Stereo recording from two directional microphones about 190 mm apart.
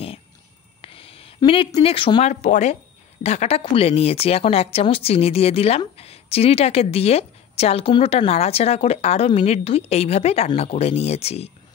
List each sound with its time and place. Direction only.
0.8 s speech: 30° left (ahead or behind)